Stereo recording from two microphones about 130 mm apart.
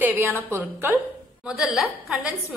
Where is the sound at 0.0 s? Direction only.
20° right (ahead or behind).